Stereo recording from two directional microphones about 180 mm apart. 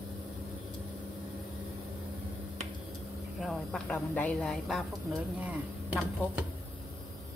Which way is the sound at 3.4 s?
Centre (ahead or behind).